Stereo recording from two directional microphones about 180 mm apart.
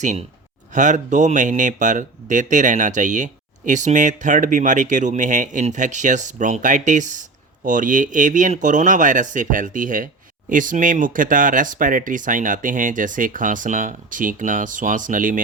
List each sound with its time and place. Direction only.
0.7 s speech: 45° right (ahead or behind)